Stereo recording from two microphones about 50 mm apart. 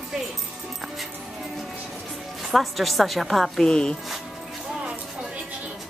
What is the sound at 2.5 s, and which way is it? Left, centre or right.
A woman's voice, centre.